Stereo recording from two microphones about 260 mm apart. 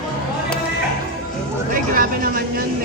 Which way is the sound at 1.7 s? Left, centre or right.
Right.